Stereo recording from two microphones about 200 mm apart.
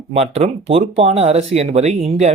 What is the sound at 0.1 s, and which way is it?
Speech, 30° right (ahead or behind).